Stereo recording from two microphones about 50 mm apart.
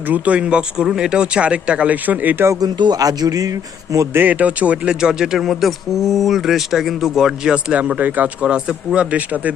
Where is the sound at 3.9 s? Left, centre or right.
Right.